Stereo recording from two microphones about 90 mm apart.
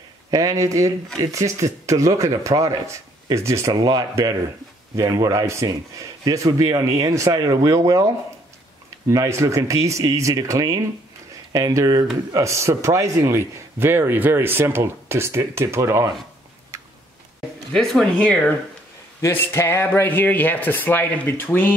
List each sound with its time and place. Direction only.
0.3 s a man's voice: 45° right (ahead or behind)
3.7 s a man's voice: 45° right (ahead or behind)
7.3 s a man's voice: 45° right (ahead or behind)
9.1 s a man's voice: 35° right (ahead or behind)
16.7 s tick-tock: 35° right (ahead or behind)
17.7 s speech: 5° left (ahead or behind)
19.3 s speech: 25° left (ahead or behind)